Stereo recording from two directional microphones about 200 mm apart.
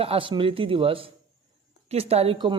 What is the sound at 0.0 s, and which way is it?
A man's voice, 25° right (ahead or behind).